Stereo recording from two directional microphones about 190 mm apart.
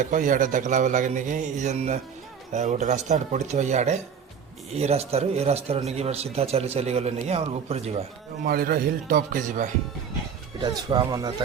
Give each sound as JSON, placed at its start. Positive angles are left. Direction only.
{"t": 0.0, "sound": "speech", "side_deg": -45}
{"t": 8.4, "sound": "a man's voice", "side_deg": -50}
{"t": 10.6, "sound": "speech", "side_deg": -20}